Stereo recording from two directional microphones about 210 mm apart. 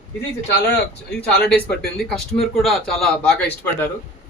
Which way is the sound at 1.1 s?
5° left (ahead or behind).